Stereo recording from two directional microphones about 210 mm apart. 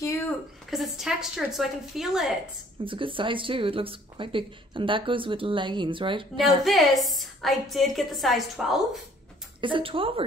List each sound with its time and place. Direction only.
0.7 s a woman's voice: centre (ahead or behind)
2.8 s speech: 25° right (ahead or behind)
6.6 s a woman's voice: centre (ahead or behind)
9.6 s speech: 25° right (ahead or behind)